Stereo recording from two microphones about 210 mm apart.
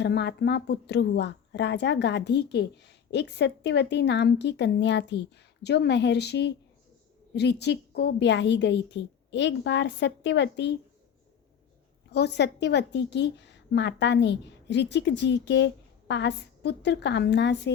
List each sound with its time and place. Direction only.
0.0 s a woman's voice: 55° left (ahead or behind)
12.1 s a woman's voice: 55° left (ahead or behind)